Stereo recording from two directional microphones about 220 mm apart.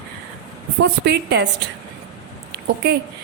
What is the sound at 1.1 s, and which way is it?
Speech, 50° right (ahead or behind).